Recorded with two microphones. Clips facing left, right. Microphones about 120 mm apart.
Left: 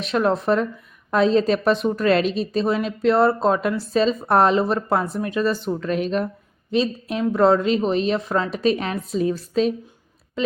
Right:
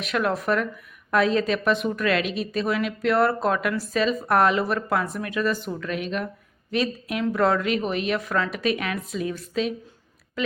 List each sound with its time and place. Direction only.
0.0 s a woman's voice: 30° left (ahead or behind)
6.7 s a woman's voice: 25° left (ahead or behind)